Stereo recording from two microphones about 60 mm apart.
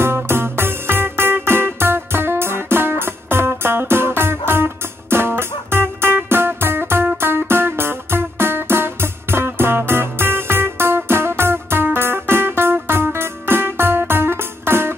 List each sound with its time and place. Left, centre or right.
0.0 s music: right